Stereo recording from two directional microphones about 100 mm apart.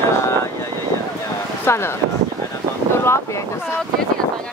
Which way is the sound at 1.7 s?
25° left (ahead or behind).